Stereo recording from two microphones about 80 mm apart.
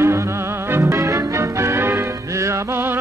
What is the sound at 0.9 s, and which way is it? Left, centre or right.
Music, right.